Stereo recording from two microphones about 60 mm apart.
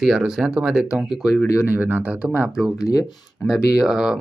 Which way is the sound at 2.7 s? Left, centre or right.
Left.